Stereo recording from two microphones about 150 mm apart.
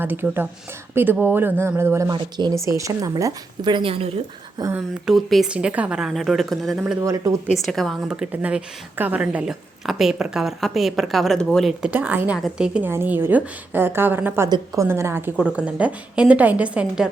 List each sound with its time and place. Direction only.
0.0 s a woman's voice: 15° right (ahead or behind); by 4.1 s 40° right (ahead or behind)
4.6 s a woman's voice: 25° right (ahead or behind)
5.0 s a woman's voice: centre (ahead or behind)
7.0 s a woman's voice: 20° right (ahead or behind)
7.6 s a woman's voice: centre (ahead or behind)
11.9 s a woman's voice: 10° right (ahead or behind)